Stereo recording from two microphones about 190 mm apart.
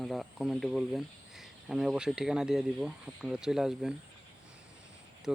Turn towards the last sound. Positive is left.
turn(degrees=0)  # may be behind; listen again after turning